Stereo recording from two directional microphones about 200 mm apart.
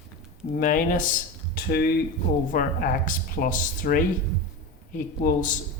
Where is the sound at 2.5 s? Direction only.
40° left (ahead or behind).